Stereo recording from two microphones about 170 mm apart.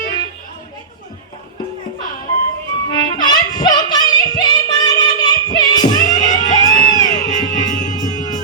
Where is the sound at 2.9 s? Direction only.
25° left (ahead or behind).